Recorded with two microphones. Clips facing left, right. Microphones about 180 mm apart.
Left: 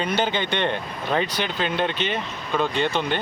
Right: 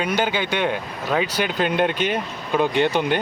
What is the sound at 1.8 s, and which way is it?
Speech, 10° right (ahead or behind).